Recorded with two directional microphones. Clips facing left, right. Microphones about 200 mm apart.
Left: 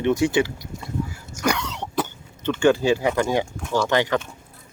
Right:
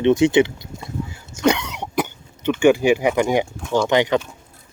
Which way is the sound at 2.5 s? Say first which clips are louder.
Right 3 dB; 15° right (ahead or behind).